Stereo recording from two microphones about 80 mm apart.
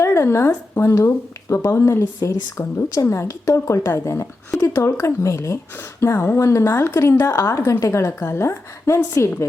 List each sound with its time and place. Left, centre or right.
0.0 s a woman's voice: left